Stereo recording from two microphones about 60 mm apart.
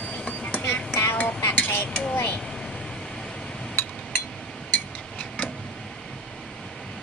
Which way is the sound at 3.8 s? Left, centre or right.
Left.